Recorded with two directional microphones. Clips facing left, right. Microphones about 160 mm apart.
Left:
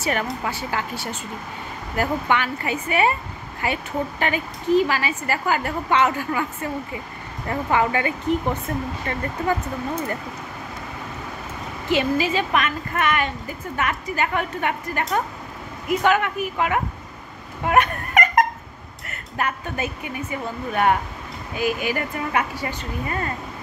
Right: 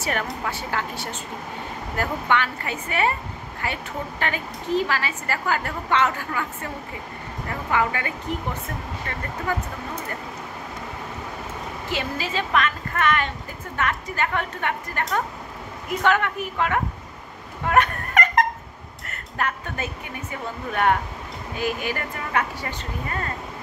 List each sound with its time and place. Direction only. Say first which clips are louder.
0.0 s a woman's voice: left 2 dB; 5° left (ahead or behind); by 8.1 s 25° left (ahead or behind)
11.9 s a woman's voice: left 8 dB; 15° left (ahead or behind)
17.6 s a sound: left 1 dB; 15° left (ahead or behind)
19.0 s a woman's voice: left 1 dB; 10° left (ahead or behind)